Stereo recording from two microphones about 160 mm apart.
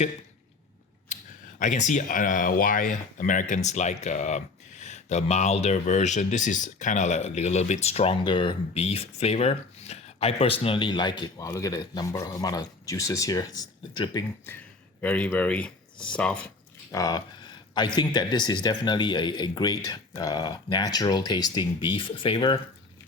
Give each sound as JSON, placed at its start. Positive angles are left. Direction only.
{"t": 1.1, "sound": "speech", "side_deg": 50}
{"t": 15.0, "sound": "speech", "side_deg": 10}
{"t": 16.9, "sound": "speech", "side_deg": 25}